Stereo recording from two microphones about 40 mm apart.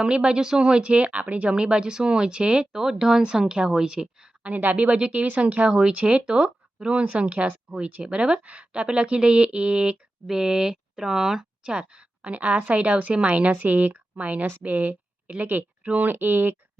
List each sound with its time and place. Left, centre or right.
0.0 s speech: right
2.7 s speech: centre
4.4 s speech: right
4.9 s speech: right
10.2 s speech: centre
13.6 s speech: right
14.6 s speech: right
15.8 s speech: right
16.0 s speech: right